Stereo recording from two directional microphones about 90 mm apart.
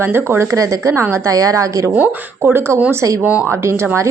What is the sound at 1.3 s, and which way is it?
Speech, 40° right (ahead or behind).